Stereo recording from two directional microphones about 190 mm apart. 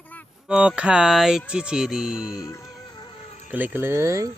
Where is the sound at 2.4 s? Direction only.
20° left (ahead or behind).